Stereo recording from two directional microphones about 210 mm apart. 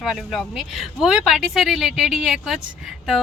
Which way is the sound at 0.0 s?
Centre (ahead or behind).